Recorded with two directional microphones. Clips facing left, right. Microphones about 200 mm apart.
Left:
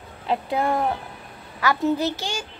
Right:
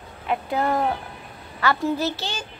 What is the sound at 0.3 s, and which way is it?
Speech, 30° left (ahead or behind).